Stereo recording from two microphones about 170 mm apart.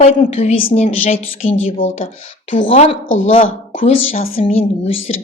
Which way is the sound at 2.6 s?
35° left (ahead or behind).